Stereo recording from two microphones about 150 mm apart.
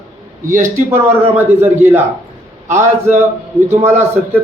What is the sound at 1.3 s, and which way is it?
A man's voice, 10° right (ahead or behind).